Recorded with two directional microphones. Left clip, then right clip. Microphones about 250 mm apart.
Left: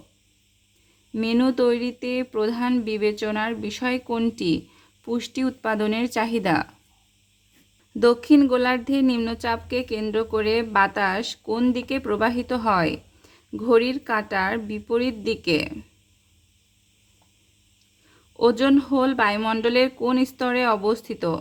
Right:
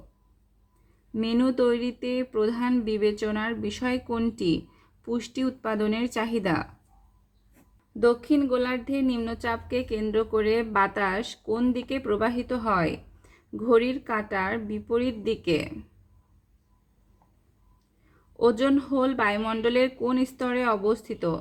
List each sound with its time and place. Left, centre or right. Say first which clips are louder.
1.1 s speech: left 3 dB; centre
7.9 s speech: left 5 dB; left
18.3 s speech: left 4 dB; left